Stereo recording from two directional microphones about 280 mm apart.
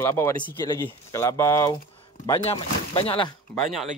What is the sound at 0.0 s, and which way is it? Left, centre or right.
Speech, centre.